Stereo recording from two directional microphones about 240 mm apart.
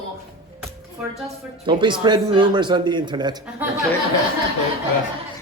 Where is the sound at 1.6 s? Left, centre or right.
Centre.